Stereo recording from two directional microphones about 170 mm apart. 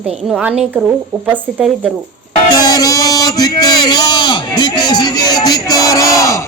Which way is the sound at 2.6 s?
20° left (ahead or behind).